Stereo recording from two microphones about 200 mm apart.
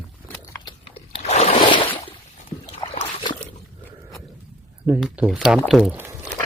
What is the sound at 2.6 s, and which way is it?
Dog, 25° left (ahead or behind).